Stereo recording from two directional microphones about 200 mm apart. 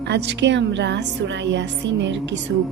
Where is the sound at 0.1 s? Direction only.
60° right (ahead or behind).